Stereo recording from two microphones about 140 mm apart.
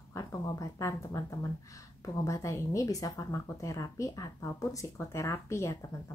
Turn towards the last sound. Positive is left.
turn(degrees=20)  # may be behind; listen again after turning